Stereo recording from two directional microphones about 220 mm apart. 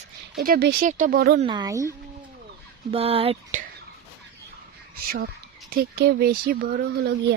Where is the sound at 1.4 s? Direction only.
20° right (ahead or behind).